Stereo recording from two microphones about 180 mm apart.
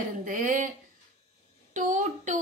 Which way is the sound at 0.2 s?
45° right (ahead or behind).